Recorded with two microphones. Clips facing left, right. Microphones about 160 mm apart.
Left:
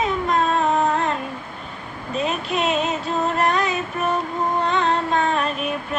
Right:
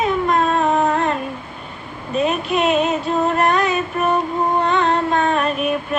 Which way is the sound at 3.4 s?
60° right (ahead or behind).